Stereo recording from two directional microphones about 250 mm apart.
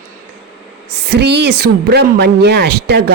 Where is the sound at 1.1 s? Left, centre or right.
Right.